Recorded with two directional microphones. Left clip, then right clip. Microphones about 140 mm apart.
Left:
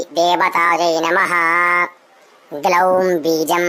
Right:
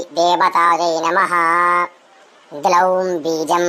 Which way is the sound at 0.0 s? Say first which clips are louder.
Even; 25° left (ahead or behind).